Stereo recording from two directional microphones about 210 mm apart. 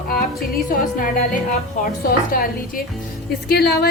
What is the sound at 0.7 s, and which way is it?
Music, 40° left (ahead or behind).